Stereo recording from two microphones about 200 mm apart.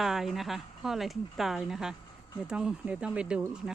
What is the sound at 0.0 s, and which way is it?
Speech, centre (ahead or behind).